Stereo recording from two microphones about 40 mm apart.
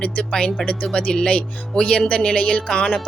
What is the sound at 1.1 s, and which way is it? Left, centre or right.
A woman's voice, left.